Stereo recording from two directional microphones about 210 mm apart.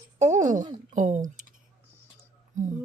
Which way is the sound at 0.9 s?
35° right (ahead or behind).